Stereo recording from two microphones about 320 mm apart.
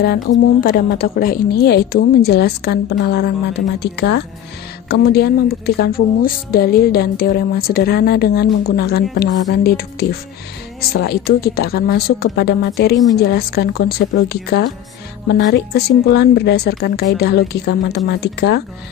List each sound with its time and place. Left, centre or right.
0.0 s a woman's voice: left